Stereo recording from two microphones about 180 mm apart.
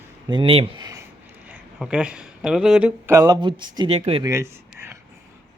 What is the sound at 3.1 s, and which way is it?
Speech, 15° right (ahead or behind).